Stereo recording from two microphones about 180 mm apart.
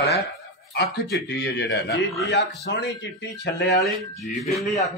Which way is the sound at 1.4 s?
75° left (ahead or behind).